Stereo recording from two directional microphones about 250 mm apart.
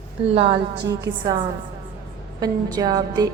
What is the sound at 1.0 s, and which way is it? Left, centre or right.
Speech, centre.